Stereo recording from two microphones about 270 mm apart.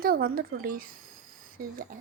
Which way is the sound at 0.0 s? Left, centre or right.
Right.